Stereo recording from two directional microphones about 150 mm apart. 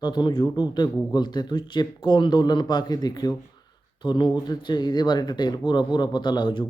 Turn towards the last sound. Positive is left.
turn(degrees=30)  # may be behind; listen again after turning